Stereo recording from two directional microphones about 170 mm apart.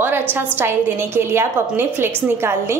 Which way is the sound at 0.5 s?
15° right (ahead or behind).